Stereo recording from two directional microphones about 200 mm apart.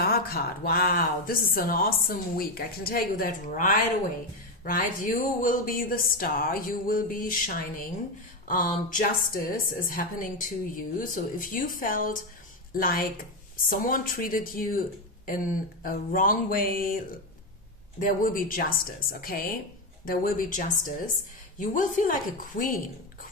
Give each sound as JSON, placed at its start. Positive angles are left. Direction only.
{"t": 0.0, "sound": "a woman's voice", "side_deg": 50}